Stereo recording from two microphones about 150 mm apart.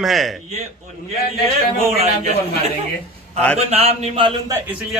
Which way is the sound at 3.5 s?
45° right (ahead or behind).